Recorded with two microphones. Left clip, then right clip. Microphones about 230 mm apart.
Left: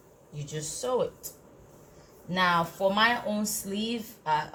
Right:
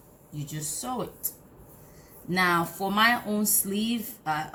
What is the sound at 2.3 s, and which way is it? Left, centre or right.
Speech, centre.